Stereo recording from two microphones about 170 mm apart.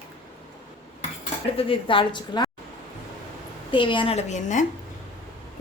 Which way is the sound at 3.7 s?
30° left (ahead or behind).